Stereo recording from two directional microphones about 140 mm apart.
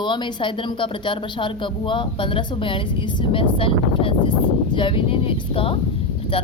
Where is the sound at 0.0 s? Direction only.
35° left (ahead or behind).